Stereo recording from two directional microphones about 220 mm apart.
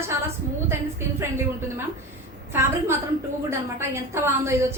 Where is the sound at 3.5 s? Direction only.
10° right (ahead or behind).